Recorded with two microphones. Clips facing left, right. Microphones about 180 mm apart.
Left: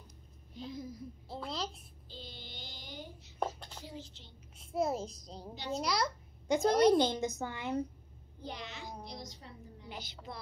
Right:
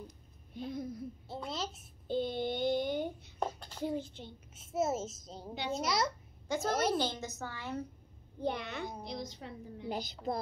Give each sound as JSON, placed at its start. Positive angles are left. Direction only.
{"t": 0.6, "sound": "a child's voice", "side_deg": -55}
{"t": 1.3, "sound": "a child's voice", "side_deg": 0}
{"t": 2.0, "sound": "child singing", "side_deg": -55}
{"t": 3.4, "sound": "a sound", "side_deg": 5}
{"t": 3.8, "sound": "a child's voice", "side_deg": -55}
{"t": 4.6, "sound": "a child's voice", "side_deg": 0}
{"t": 7.0, "sound": "a woman's voice", "side_deg": 15}
{"t": 8.4, "sound": "a child's voice", "side_deg": -55}
{"t": 9.4, "sound": "a woman's voice", "side_deg": -80}
{"t": 9.8, "sound": "a woman's voice", "side_deg": -40}